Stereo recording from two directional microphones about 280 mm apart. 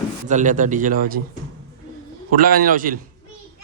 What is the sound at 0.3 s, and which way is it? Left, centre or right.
Speech, right.